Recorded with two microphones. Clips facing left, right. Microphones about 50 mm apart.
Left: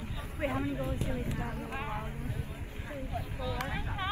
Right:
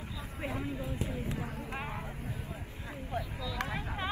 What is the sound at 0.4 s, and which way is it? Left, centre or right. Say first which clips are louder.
Speech: left 5 dB; left.